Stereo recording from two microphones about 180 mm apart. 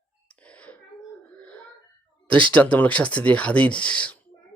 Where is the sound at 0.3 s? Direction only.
5° left (ahead or behind).